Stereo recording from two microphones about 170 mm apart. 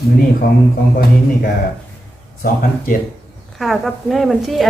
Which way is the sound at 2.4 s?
55° left (ahead or behind).